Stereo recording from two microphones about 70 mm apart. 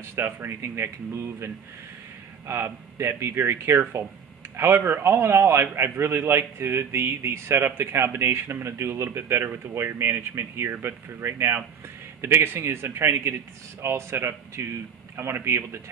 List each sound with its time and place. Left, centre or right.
0.1 s speech: right